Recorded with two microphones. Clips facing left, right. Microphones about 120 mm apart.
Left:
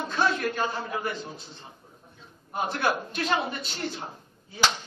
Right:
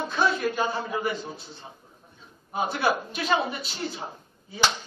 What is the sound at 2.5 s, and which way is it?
A man's voice, 5° right (ahead or behind).